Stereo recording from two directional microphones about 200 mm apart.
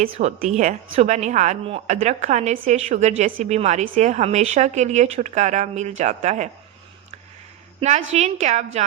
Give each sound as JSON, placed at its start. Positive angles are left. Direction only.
{"t": 0.1, "sound": "a woman's voice", "side_deg": -35}
{"t": 7.8, "sound": "a woman's voice", "side_deg": -35}